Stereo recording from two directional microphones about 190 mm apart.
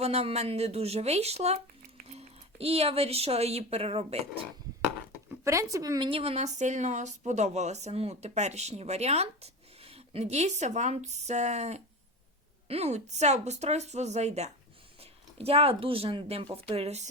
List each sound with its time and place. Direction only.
0.0 s a woman's voice: 35° right (ahead or behind)
5.5 s a woman's voice: 15° right (ahead or behind); by 17.1 s 35° right (ahead or behind)